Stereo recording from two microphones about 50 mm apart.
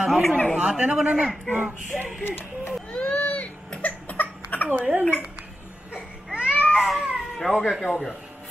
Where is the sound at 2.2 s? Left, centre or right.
Left.